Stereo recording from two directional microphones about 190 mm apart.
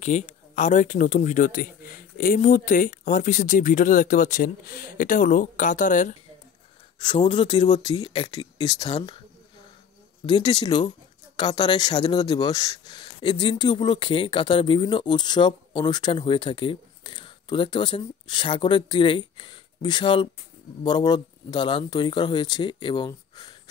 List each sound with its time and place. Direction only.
0.0 s speech: 40° left (ahead or behind)
7.0 s speech: 25° left (ahead or behind)
10.2 s speech: 25° left (ahead or behind)